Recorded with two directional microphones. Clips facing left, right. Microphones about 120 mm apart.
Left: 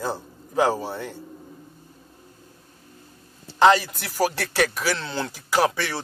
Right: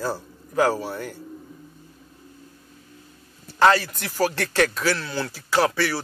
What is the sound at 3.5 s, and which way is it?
A man's voice, 20° left (ahead or behind).